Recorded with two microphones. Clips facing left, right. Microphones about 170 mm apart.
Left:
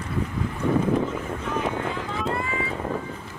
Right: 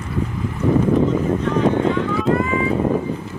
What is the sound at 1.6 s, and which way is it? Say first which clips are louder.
Clip-clop: right 12 dB; 70° right (ahead or behind).